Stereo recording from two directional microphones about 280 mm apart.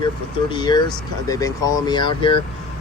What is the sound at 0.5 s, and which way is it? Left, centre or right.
Speech, centre.